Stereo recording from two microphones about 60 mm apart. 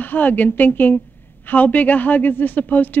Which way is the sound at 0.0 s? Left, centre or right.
Left.